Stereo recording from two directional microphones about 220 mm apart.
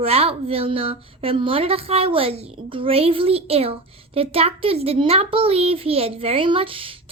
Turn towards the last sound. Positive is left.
turn(degrees=-25)  # may be behind; listen again after turning